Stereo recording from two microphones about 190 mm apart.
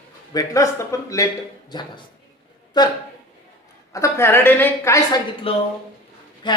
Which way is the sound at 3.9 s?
15° left (ahead or behind).